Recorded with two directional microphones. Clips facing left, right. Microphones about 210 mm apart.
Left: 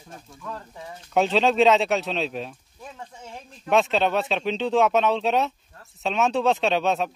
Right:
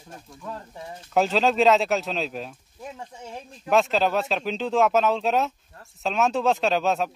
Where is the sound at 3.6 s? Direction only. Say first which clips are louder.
Even; centre (ahead or behind).